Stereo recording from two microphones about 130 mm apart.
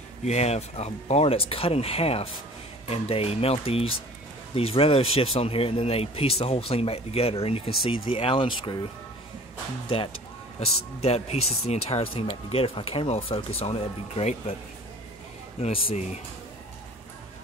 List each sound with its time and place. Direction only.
0.2 s speech: 55° left (ahead or behind)
10.6 s speech: 50° left (ahead or behind)
15.6 s speech: 50° left (ahead or behind)